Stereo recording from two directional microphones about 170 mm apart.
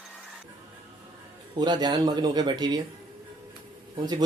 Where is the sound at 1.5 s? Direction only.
25° right (ahead or behind).